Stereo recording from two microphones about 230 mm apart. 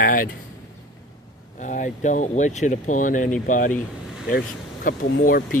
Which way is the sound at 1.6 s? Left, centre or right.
Left.